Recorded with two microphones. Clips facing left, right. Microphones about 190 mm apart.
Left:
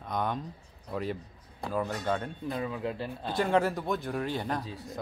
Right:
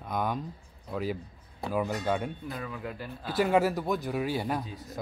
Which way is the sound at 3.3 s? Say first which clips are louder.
Right 2 dB; 5° right (ahead or behind).